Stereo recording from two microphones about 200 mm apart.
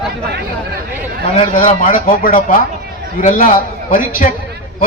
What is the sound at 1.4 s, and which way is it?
A man's voice, 40° left (ahead or behind).